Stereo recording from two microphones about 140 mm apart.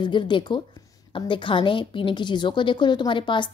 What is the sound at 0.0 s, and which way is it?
A woman's voice, 35° left (ahead or behind).